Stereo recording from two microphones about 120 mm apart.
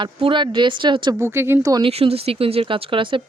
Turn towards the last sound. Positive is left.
turn(degrees=-45)  # may be behind; listen again after turning